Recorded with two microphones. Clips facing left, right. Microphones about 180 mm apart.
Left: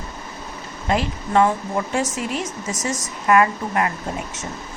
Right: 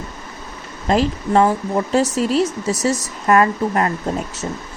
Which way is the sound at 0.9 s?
35° right (ahead or behind).